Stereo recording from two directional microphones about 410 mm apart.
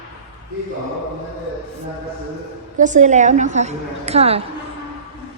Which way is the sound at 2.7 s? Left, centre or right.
Centre.